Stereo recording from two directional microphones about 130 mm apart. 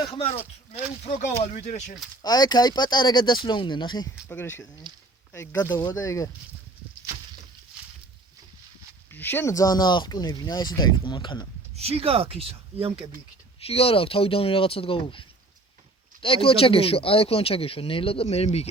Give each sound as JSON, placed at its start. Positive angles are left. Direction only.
{"t": 0.0, "sound": "speech", "side_deg": 45}
{"t": 1.0, "sound": "speech", "side_deg": 75}
{"t": 2.2, "sound": "speech", "side_deg": 30}
{"t": 4.3, "sound": "speech", "side_deg": 15}
{"t": 9.1, "sound": "speech", "side_deg": 15}
{"t": 11.7, "sound": "speech", "side_deg": -50}
{"t": 13.6, "sound": "speech", "side_deg": 50}